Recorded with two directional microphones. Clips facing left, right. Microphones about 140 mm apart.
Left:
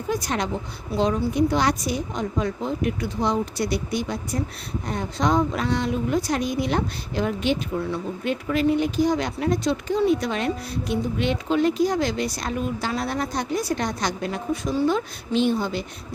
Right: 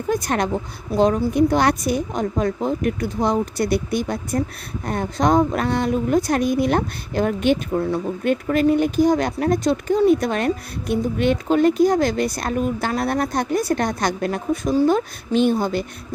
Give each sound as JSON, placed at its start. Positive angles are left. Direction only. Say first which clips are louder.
{"t": 0.1, "sound": "a woman's voice", "louder": "right 4 dB", "side_deg": -55}